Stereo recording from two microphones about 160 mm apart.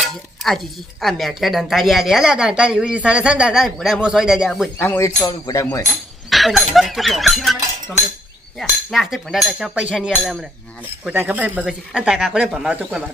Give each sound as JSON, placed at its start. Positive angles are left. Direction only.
{"t": 1.0, "sound": "speech", "side_deg": 0}
{"t": 4.8, "sound": "speech", "side_deg": 15}
{"t": 6.3, "sound": "speech", "side_deg": 0}
{"t": 11.0, "sound": "speech", "side_deg": -10}